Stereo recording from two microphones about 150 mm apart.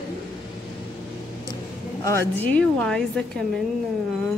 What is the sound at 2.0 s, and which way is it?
A woman's voice, 15° left (ahead or behind).